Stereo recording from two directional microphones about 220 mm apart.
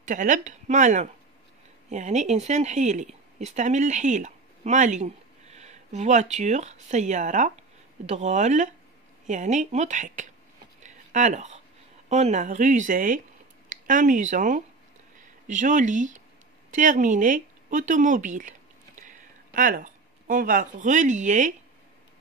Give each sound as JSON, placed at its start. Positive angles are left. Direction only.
{"t": 0.0, "sound": "speech", "side_deg": -35}
{"t": 10.8, "sound": "a sound", "side_deg": -35}
{"t": 12.1, "sound": "speech", "side_deg": -30}